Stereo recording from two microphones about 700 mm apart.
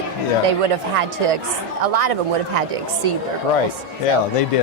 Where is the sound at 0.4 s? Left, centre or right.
Right.